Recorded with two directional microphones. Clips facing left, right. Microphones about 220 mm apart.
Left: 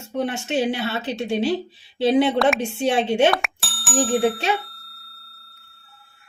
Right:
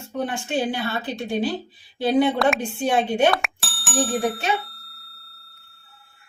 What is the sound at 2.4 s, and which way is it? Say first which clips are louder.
Speech: left 1 dB; centre (ahead or behind).